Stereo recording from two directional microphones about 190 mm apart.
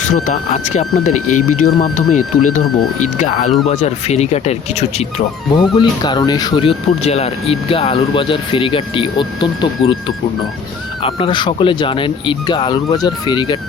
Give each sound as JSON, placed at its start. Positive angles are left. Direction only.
{"t": 0.0, "sound": "speech", "side_deg": 40}
{"t": 5.7, "sound": "speech", "side_deg": 25}
{"t": 11.0, "sound": "speech", "side_deg": 25}